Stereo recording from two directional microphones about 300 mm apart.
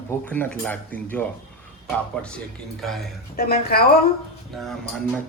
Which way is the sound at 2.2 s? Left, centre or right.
Centre.